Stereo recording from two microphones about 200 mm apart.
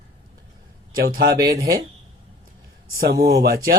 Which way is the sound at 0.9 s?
50° right (ahead or behind).